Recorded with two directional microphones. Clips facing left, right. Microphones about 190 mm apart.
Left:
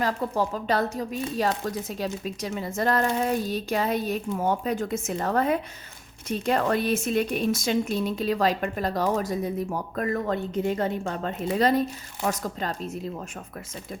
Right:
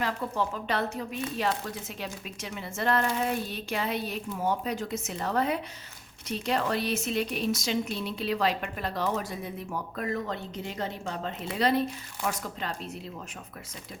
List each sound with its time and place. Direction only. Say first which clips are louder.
0.0 s a woman's voice: left 4 dB; 40° left (ahead or behind)